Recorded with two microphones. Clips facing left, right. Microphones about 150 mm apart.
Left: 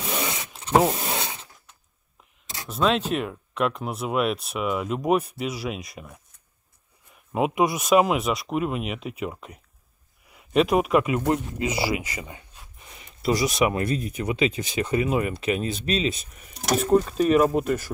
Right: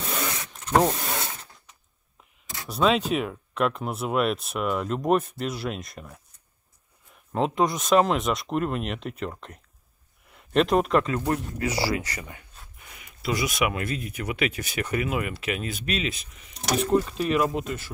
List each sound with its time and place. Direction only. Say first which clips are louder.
0.1 s vehicle: left 2 dB; 20° left (ahead or behind)
0.9 s rub: left 2 dB; 25° left (ahead or behind)
2.7 s speech: right 1 dB; centre (ahead or behind)
7.3 s speech: left 1 dB; 10° left (ahead or behind)
11.1 s speech: left 3 dB; 20° left (ahead or behind)
13.5 s speech: left 4 dB; 30° left (ahead or behind)
16.7 s speech: left 3 dB; 40° left (ahead or behind)